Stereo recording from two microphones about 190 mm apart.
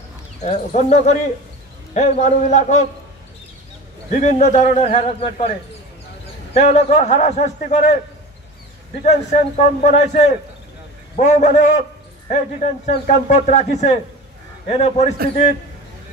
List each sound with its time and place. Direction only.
0.4 s a man's voice: 35° left (ahead or behind)
4.2 s a man's voice: 40° left (ahead or behind)
6.5 s a man's voice: 35° left (ahead or behind)
9.0 s a man's voice: 40° left (ahead or behind)